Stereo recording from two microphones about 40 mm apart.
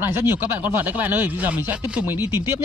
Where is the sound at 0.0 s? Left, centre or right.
Right.